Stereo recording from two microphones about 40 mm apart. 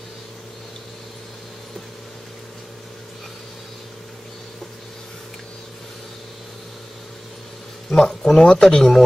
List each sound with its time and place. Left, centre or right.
7.9 s speech: centre